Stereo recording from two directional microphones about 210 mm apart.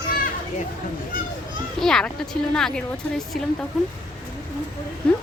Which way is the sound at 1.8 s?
Centre (ahead or behind).